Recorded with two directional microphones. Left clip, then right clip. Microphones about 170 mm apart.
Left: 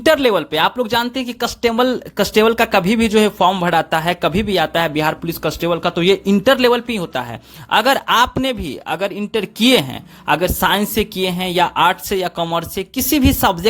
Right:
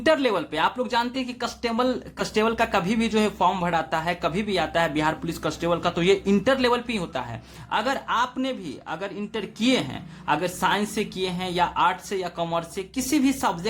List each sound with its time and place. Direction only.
0.0 s speech: 40° left (ahead or behind)
7.7 s speech: 50° left (ahead or behind)